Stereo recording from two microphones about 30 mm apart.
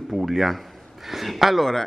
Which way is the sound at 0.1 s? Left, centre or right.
Centre.